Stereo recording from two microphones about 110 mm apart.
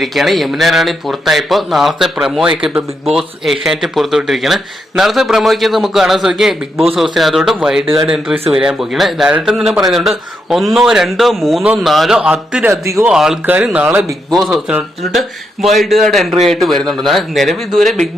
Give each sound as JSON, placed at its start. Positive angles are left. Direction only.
{"t": 0.0, "sound": "speech", "side_deg": 0}
{"t": 12.6, "sound": "speech", "side_deg": -30}
{"t": 13.1, "sound": "speech", "side_deg": -5}
{"t": 13.8, "sound": "speech", "side_deg": -25}
{"t": 14.3, "sound": "speech", "side_deg": 0}